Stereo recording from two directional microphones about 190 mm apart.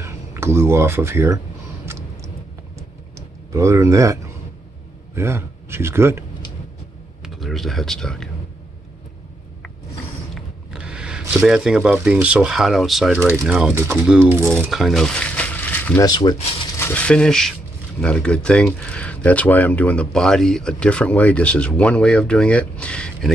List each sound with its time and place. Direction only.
0.0 s speech: 15° right (ahead or behind)
1.9 s a sound: 15° right (ahead or behind)
3.2 s speech: 15° right (ahead or behind)
7.2 s speech: centre (ahead or behind)
10.3 s speech: 5° right (ahead or behind)
16.1 s speech: 20° left (ahead or behind)